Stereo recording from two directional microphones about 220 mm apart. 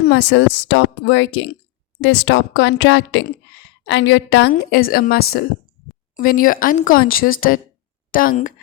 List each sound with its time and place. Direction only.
0.1 s a woman's voice: 55° left (ahead or behind); by 8.5 s 40° left (ahead or behind)